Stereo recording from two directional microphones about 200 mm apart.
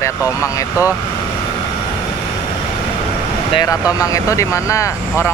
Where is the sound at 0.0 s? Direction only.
15° left (ahead or behind).